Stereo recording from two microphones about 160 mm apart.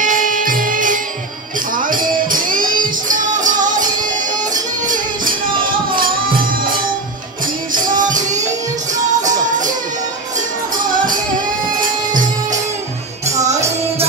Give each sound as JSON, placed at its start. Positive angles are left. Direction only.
{"t": 0.0, "sound": "music", "side_deg": -55}
{"t": 4.8, "sound": "music", "side_deg": -55}
{"t": 7.7, "sound": "music", "side_deg": -55}